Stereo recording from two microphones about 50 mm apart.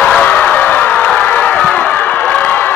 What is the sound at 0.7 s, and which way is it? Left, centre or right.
Vehicle, left.